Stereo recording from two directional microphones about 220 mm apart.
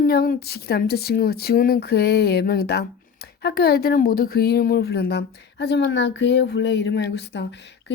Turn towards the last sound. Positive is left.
turn(degrees=50)  # may be behind; listen again after turning